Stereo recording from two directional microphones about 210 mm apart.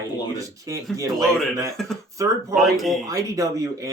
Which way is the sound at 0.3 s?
15° right (ahead or behind).